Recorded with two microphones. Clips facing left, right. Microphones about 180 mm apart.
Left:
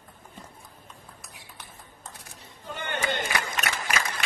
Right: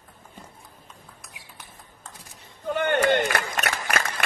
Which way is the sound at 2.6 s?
60° right (ahead or behind).